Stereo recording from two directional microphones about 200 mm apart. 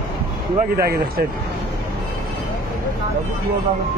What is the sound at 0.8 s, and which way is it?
Speech, 50° right (ahead or behind).